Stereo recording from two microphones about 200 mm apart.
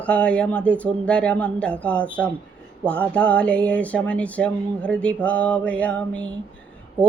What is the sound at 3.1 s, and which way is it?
Speech, 5° left (ahead or behind).